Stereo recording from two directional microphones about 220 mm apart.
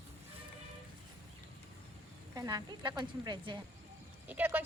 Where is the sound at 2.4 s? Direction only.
20° right (ahead or behind).